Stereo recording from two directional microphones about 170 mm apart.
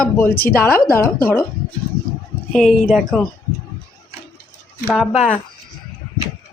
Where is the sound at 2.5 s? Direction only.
Centre (ahead or behind).